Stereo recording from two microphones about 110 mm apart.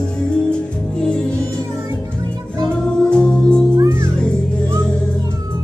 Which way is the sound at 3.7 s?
25° right (ahead or behind).